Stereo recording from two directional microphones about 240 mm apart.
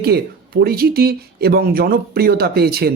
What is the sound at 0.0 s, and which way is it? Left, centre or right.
A man's voice, right.